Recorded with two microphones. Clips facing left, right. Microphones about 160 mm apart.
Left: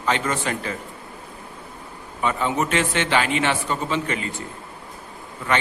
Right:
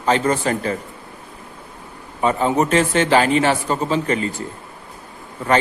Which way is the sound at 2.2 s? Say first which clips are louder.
Right 5 dB; 35° right (ahead or behind).